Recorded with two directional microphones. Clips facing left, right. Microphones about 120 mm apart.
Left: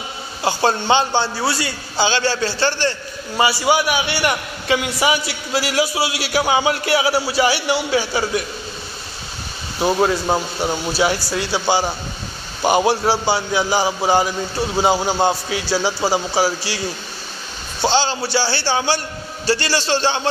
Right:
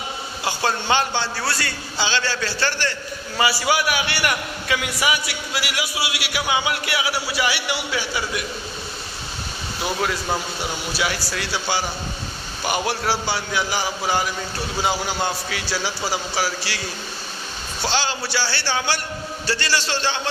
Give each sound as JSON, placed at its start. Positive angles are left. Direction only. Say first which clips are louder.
{"t": 0.4, "sound": "a man's voice", "louder": "left 6 dB", "side_deg": 30}
{"t": 2.0, "sound": "a man's voice", "louder": "left 6 dB", "side_deg": 35}
{"t": 9.8, "sound": "a man's voice", "louder": "left 8 dB", "side_deg": 30}
{"t": 17.8, "sound": "a man's voice", "louder": "left 6 dB", "side_deg": 30}